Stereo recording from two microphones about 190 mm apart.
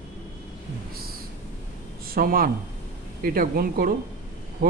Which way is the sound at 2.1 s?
50° right (ahead or behind).